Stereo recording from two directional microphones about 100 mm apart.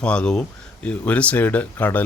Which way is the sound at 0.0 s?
10° left (ahead or behind).